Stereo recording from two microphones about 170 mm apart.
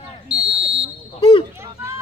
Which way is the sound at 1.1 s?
35° left (ahead or behind).